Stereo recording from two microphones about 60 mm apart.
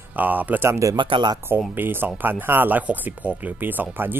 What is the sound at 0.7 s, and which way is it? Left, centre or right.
Speech, right.